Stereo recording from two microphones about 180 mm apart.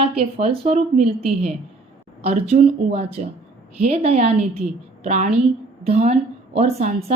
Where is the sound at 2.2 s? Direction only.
35° right (ahead or behind).